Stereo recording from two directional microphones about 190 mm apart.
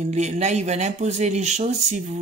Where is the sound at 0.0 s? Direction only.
35° right (ahead or behind).